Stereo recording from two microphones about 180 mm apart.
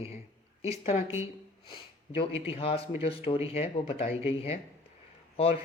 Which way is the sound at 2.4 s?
35° left (ahead or behind).